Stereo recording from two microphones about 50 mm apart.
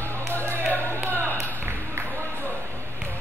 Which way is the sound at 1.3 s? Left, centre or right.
Right.